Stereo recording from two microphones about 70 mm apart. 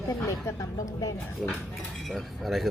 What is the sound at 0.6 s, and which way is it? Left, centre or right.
Speech, left.